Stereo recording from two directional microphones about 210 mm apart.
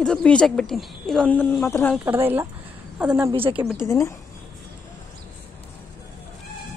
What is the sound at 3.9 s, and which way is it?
Speech, 15° left (ahead or behind).